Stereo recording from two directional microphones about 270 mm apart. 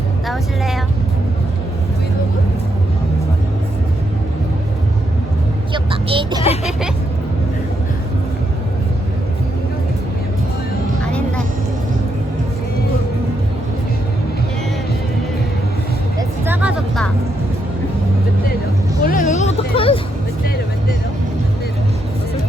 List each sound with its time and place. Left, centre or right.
0.3 s music: centre
5.7 s vehicle: centre
6.7 s vehicle: centre
16.5 s music: centre
19.0 s hubbub: left